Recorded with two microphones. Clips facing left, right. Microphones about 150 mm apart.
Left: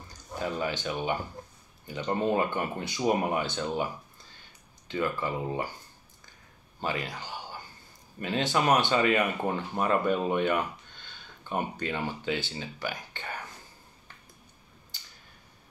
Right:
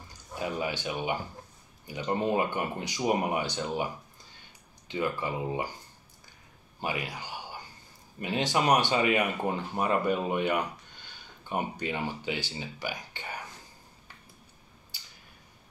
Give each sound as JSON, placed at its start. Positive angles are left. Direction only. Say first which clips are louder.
{"t": 0.4, "sound": "speech", "louder": "left 1 dB", "side_deg": -10}
{"t": 6.8, "sound": "speech", "louder": "left 1 dB", "side_deg": -15}